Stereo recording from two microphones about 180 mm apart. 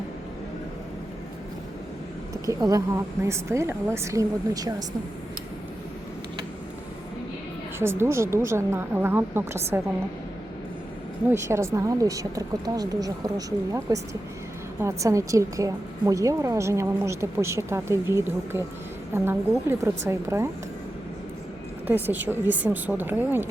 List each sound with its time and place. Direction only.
2.5 s a woman's voice: 20° right (ahead or behind)
7.8 s a woman's voice: 15° right (ahead or behind)
11.3 s a woman's voice: 15° right (ahead or behind)
21.8 s a woman's voice: 10° right (ahead or behind)